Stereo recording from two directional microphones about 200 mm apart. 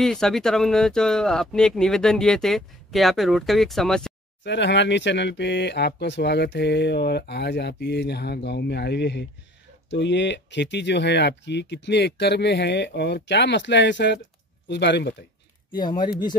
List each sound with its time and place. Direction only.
0.0 s speech: centre (ahead or behind)
4.4 s speech: 60° left (ahead or behind)
15.8 s speech: 20° left (ahead or behind)